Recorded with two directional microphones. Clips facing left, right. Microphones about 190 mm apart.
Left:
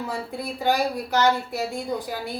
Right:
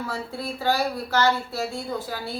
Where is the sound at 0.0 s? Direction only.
15° left (ahead or behind).